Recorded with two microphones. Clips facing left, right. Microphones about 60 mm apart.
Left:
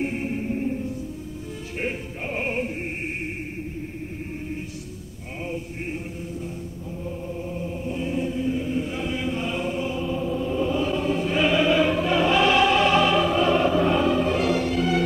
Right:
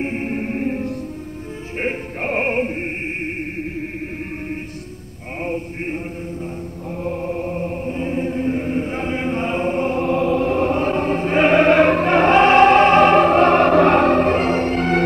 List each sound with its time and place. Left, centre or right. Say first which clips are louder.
0.0 s music: right 4 dB; right
1.8 s opera: right 6 dB; right
5.4 s a sound: right 6 dB; right
7.0 s chant: right 9 dB; right
7.9 s chant: right 2 dB; right